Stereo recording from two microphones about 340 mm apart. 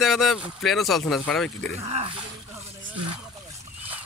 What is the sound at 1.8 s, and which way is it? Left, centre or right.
Speech, centre.